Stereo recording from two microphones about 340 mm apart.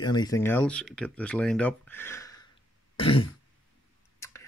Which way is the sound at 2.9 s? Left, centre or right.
Centre.